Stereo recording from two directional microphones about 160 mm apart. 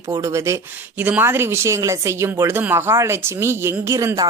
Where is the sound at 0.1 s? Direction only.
20° right (ahead or behind).